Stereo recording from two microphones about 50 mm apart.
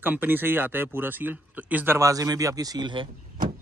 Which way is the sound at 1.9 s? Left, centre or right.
Right.